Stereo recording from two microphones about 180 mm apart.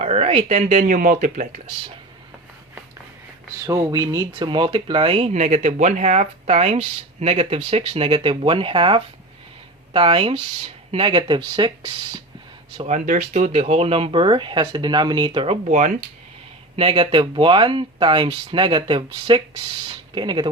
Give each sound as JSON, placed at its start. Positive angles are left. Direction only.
{"t": 0.0, "sound": "speech", "side_deg": -35}
{"t": 3.7, "sound": "speech", "side_deg": -20}
{"t": 12.7, "sound": "speech", "side_deg": -30}
{"t": 13.1, "sound": "speech", "side_deg": -45}
{"t": 16.7, "sound": "speech", "side_deg": -30}